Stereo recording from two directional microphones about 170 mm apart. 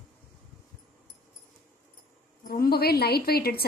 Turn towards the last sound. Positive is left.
turn(degrees=65)  # may be behind; listen again after turning